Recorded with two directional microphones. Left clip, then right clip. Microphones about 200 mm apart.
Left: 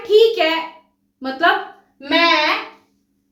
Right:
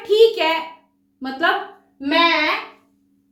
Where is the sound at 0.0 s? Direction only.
15° right (ahead or behind).